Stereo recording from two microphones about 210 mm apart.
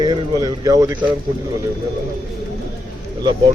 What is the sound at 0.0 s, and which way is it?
Speech, 20° right (ahead or behind).